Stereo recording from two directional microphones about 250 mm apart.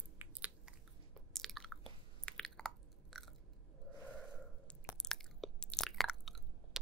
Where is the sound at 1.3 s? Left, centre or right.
Centre.